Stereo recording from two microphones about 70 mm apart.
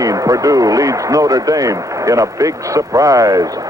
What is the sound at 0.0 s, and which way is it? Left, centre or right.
Speech, right.